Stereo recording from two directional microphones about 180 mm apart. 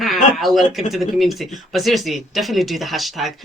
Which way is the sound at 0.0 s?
Centre (ahead or behind).